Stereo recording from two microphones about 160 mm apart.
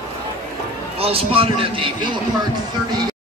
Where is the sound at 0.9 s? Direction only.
35° right (ahead or behind).